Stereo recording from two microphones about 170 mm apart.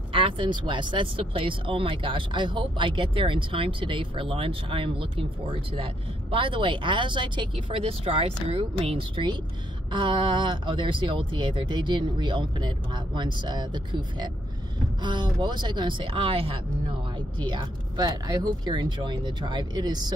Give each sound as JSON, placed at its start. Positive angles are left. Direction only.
{"t": 0.1, "sound": "speech", "side_deg": -30}